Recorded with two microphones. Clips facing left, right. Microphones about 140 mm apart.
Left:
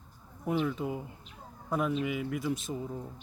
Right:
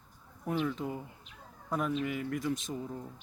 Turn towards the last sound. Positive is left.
turn(degrees=5)  # may be behind; listen again after turning